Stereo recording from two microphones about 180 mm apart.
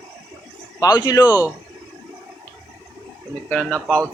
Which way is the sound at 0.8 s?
20° left (ahead or behind).